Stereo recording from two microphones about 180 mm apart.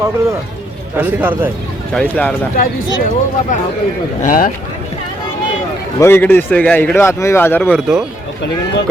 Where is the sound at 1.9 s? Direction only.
10° left (ahead or behind).